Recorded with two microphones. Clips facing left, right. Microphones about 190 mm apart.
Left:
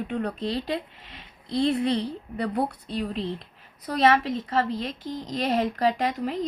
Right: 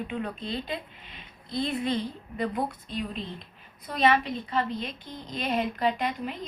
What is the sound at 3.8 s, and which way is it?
A woman's voice, 90° left.